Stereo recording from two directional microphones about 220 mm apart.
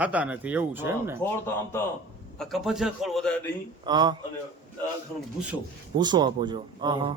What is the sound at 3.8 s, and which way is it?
Speech, 20° right (ahead or behind).